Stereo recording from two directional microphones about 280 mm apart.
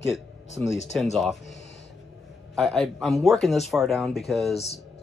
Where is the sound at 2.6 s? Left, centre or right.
Centre.